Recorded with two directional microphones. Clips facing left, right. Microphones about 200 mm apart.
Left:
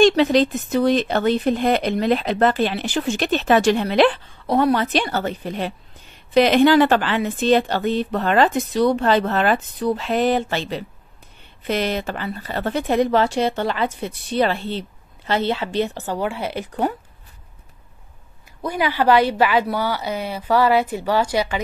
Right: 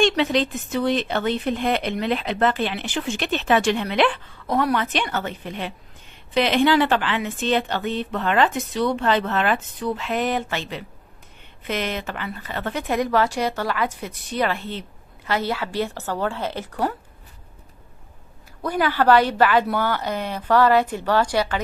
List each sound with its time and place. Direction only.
0.0 s speech: 40° left (ahead or behind); by 16.9 s 15° left (ahead or behind)
18.6 s a woman's voice: 10° left (ahead or behind)